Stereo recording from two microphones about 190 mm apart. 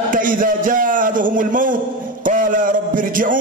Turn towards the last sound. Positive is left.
turn(degrees=-45)  # may be behind; listen again after turning